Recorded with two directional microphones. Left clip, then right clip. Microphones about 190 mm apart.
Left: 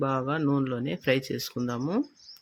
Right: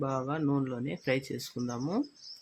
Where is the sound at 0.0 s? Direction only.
25° left (ahead or behind).